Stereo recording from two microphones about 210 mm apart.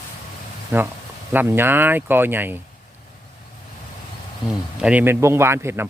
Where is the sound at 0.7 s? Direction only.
10° right (ahead or behind).